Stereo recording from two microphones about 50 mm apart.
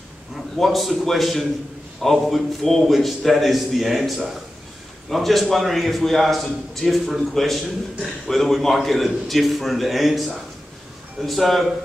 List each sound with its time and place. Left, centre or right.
0.6 s a man's voice: centre